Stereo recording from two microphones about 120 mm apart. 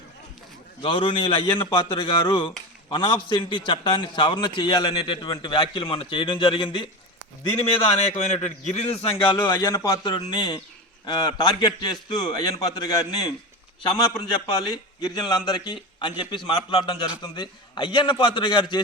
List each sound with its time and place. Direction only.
0.8 s a man's voice: 45° left (ahead or behind)
8.1 s a man's voice: 70° left (ahead or behind); by 13.3 s 30° left (ahead or behind)
15.0 s a man's voice: 35° left (ahead or behind)